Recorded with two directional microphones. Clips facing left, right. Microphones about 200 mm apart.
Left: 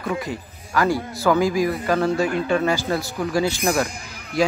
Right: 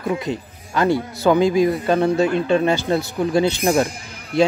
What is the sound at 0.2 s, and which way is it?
Speech, 25° right (ahead or behind).